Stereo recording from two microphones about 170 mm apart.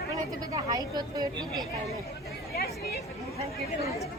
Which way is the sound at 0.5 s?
25° right (ahead or behind).